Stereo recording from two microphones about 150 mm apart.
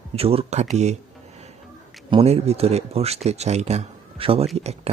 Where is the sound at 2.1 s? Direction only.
40° right (ahead or behind).